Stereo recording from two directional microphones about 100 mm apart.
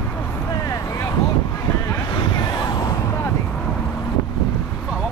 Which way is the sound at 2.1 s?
45° left (ahead or behind).